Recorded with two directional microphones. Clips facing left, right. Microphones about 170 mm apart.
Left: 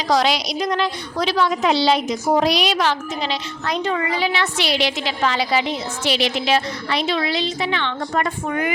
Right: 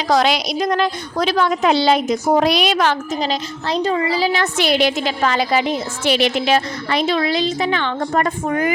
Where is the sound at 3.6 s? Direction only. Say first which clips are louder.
Right 3 dB; 35° right (ahead or behind).